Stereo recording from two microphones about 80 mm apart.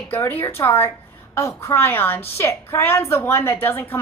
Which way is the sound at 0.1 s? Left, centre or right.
Left.